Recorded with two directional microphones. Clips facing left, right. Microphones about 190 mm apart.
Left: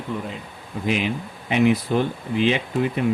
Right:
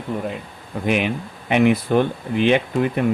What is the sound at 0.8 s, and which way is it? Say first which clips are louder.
Speech: right 3 dB; 55° right (ahead or behind).